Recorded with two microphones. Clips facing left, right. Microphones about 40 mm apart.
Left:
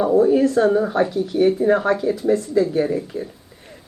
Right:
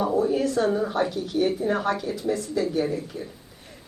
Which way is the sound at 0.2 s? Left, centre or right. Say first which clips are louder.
Left 9 dB; left.